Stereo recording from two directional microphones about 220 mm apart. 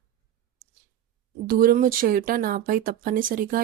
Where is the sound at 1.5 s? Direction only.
40° right (ahead or behind).